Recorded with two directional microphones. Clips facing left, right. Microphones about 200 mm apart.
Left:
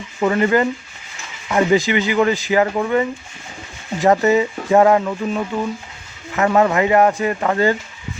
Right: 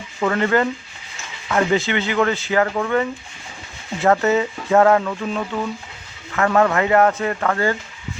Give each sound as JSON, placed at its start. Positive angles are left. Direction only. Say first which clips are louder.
{"t": 0.2, "sound": "speech", "louder": "left 2 dB", "side_deg": 15}